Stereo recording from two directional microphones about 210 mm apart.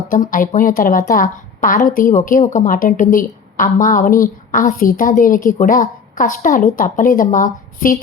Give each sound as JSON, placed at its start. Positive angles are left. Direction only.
{"t": 0.1, "sound": "a woman's voice", "side_deg": 40}